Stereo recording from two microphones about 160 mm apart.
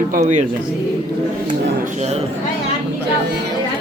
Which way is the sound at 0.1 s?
50° right (ahead or behind).